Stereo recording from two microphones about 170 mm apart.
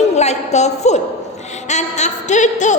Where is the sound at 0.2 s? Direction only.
40° left (ahead or behind).